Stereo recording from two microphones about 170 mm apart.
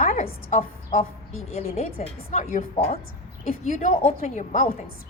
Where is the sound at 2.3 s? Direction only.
45° left (ahead or behind).